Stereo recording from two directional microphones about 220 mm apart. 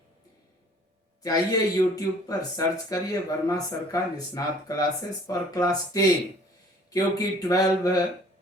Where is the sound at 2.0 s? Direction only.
15° left (ahead or behind).